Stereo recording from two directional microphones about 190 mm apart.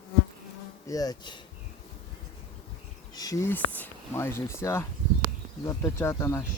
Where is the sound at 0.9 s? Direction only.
20° left (ahead or behind).